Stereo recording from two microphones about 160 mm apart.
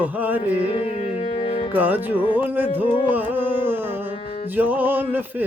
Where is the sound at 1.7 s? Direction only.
10° right (ahead or behind).